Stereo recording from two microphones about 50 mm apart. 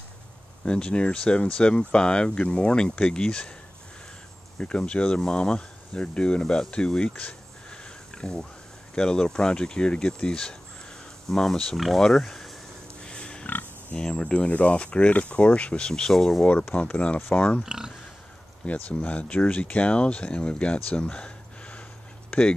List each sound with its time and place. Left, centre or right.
0.7 s speech: centre
4.6 s speech: left
7.7 s a sound: centre
8.9 s speech: centre
13.0 s pig: centre
13.5 s pig: left
13.9 s speech: centre
15.9 s speech: centre
16.4 s speech: left
17.6 s speech: centre
18.7 s speech: left